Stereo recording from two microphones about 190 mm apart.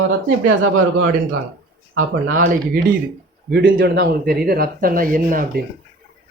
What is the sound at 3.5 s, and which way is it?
Speech, 55° right (ahead or behind).